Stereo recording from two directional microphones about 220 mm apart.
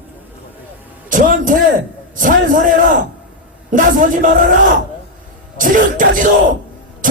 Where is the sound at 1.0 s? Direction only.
35° right (ahead or behind).